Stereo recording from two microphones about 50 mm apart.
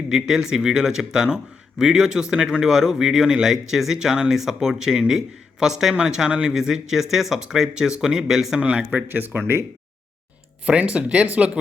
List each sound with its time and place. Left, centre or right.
0.1 s speech: centre
8.6 s speech: right
9.0 s speech: right
10.7 s speech: right